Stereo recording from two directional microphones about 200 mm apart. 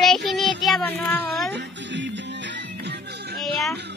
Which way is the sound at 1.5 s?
60° right (ahead or behind).